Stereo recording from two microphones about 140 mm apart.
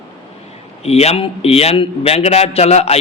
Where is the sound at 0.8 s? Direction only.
50° left (ahead or behind).